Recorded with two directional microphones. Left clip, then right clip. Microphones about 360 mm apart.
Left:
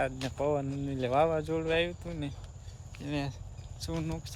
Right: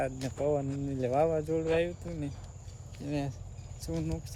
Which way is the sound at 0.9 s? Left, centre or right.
Centre.